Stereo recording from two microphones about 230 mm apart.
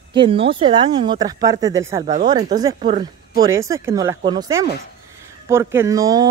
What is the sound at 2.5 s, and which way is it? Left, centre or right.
Speech, centre.